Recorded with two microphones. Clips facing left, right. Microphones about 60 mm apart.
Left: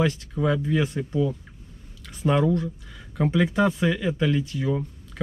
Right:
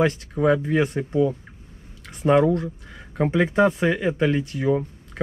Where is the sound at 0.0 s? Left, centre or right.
Right.